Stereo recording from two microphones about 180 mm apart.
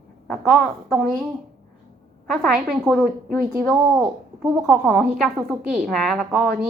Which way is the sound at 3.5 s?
20° right (ahead or behind).